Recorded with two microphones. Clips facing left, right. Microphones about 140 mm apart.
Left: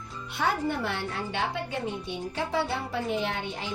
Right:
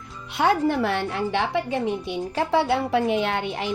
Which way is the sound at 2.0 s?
75° right (ahead or behind).